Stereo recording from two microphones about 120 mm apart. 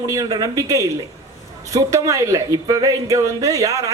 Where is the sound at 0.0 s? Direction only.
25° right (ahead or behind).